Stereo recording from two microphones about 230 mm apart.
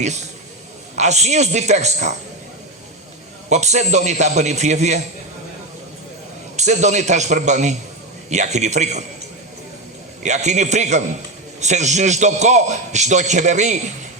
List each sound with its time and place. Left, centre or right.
0.0 s a man's voice: right
3.5 s a man's voice: right
6.6 s a man's voice: right
10.2 s a man's voice: right